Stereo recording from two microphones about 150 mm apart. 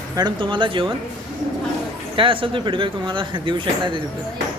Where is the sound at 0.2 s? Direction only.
30° right (ahead or behind).